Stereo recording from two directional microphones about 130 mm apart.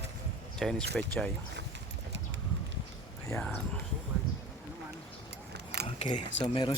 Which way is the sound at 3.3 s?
10° left (ahead or behind).